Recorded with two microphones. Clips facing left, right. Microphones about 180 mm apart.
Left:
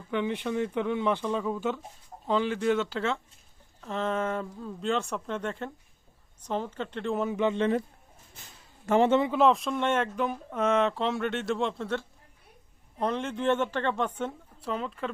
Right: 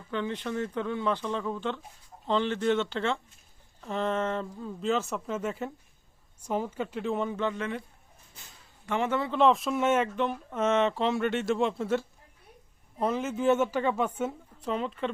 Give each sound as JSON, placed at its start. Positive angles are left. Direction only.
{"t": 0.1, "sound": "speech", "side_deg": 15}
{"t": 7.5, "sound": "a man's voice", "side_deg": 30}
{"t": 9.0, "sound": "speech", "side_deg": 20}
{"t": 9.3, "sound": "speech", "side_deg": 0}